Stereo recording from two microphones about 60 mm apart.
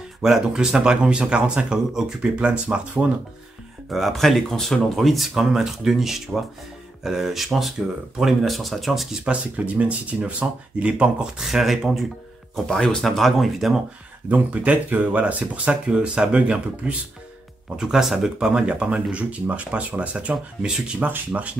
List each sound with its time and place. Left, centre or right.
0.2 s speech: centre
2.3 s speech: centre
3.9 s speech: centre
9.2 s speech: right
11.4 s speech: centre
12.5 s speech: centre
14.3 s speech: right
17.7 s speech: centre
21.0 s speech: right